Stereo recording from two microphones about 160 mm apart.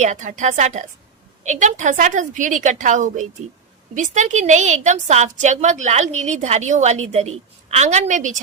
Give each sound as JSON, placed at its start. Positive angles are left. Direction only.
{"t": 0.0, "sound": "a woman's voice", "side_deg": -50}